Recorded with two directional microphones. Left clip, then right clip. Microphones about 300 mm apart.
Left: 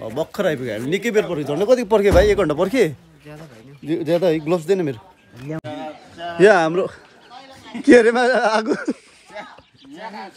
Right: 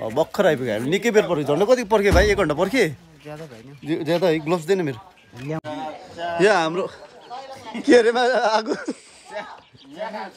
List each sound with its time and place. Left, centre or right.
0.0 s speech: centre
1.7 s speech: centre
3.3 s speech: centre
3.8 s speech: centre
5.4 s a sound: centre
6.4 s speech: centre
7.3 s a sound: right
7.8 s speech: left